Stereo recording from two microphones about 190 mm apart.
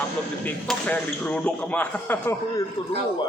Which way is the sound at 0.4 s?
5° left (ahead or behind).